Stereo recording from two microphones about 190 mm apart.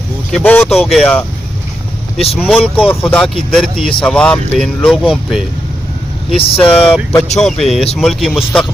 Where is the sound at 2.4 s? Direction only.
5° right (ahead or behind).